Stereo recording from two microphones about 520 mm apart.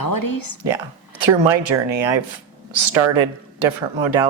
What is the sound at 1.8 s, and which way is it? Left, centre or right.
Speech, right.